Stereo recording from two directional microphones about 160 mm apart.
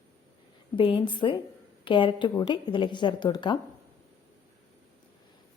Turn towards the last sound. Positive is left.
turn(degrees=25)  # may be behind; listen again after turning